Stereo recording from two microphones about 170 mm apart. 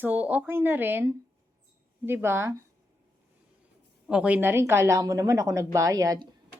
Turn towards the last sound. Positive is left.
turn(degrees=-20)  # may be behind; listen again after turning